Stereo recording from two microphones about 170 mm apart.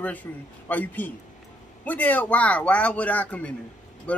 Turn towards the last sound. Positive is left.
turn(degrees=10)  # may be behind; listen again after turning